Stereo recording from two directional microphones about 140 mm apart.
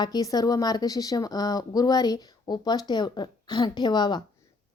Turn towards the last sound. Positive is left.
turn(degrees=30)  # may be behind; listen again after turning